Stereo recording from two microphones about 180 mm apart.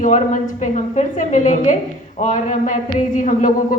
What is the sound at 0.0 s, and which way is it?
A woman's voice, 45° left (ahead or behind).